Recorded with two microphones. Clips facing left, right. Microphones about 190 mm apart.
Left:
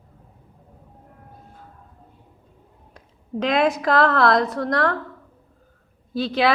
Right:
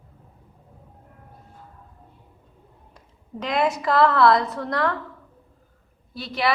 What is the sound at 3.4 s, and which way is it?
A woman's voice, 90° left.